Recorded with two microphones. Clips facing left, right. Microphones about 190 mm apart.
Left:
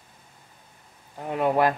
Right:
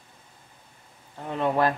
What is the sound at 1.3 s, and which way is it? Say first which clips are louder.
Speech: left 2 dB; 10° left (ahead or behind).